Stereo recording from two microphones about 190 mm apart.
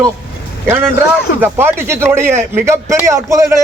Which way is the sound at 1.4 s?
10° right (ahead or behind).